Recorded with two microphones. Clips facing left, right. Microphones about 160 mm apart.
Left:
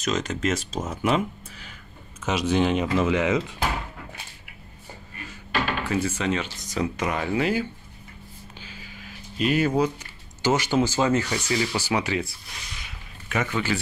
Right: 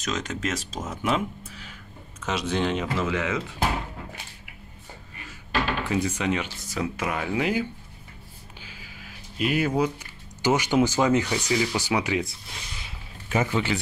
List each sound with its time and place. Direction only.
0.0 s speech: centre (ahead or behind); by 3.5 s 20° left (ahead or behind)
5.9 s speech: 15° right (ahead or behind)
12.8 s a sound: 30° right (ahead or behind)
13.5 s speech: 20° right (ahead or behind)